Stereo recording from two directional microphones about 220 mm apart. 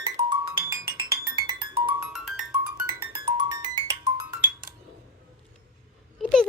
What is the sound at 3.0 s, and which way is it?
Music, 20° right (ahead or behind).